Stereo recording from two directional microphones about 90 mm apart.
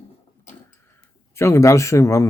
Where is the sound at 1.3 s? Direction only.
30° left (ahead or behind).